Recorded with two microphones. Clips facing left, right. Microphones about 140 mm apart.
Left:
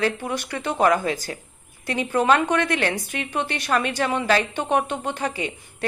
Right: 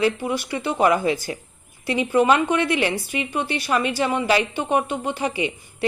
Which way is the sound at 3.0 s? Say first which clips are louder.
Right 3 dB; 55° left (ahead or behind).